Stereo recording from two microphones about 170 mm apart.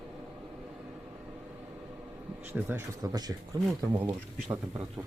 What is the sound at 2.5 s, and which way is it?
Speech, 15° right (ahead or behind).